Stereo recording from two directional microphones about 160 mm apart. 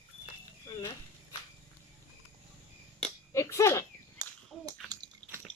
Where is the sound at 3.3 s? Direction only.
20° left (ahead or behind).